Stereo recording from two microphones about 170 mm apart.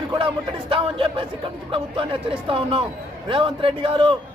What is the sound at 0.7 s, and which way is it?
A man's voice, 30° right (ahead or behind).